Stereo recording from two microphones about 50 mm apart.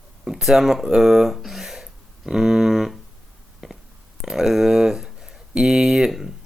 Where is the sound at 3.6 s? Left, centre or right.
Centre.